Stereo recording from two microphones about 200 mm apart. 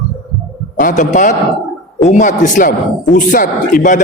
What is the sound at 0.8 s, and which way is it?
A man's voice, 40° left (ahead or behind).